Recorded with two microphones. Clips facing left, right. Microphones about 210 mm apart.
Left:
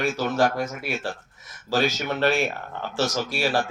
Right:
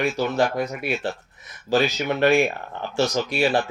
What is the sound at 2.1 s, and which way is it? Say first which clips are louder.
Speech: right 4 dB; 15° right (ahead or behind).